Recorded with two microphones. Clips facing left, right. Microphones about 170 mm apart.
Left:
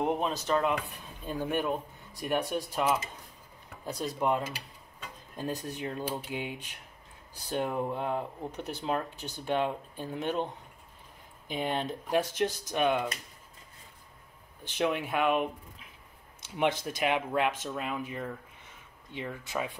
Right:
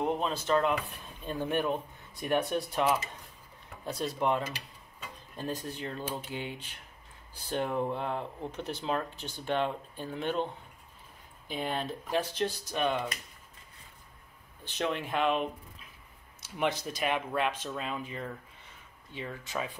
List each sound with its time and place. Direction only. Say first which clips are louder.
0.0 s a sound: left 1 dB; 15° left (ahead or behind)
0.5 s speech: right 2 dB; centre (ahead or behind)
3.8 s speech: even; 15° left (ahead or behind)
14.6 s speech: left 3 dB; 10° left (ahead or behind)
16.5 s speech: left 2 dB; 15° left (ahead or behind)